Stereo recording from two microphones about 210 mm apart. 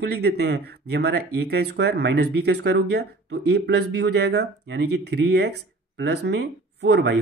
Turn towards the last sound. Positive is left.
turn(degrees=-55)  # may be behind; listen again after turning